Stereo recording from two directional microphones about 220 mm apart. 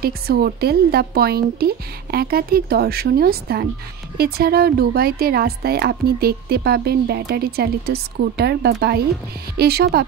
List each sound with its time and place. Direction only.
0.0 s speech: 45° right (ahead or behind)